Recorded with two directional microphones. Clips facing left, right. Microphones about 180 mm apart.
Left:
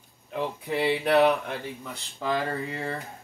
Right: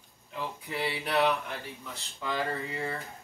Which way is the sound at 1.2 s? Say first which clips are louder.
Left 5 dB; 35° left (ahead or behind).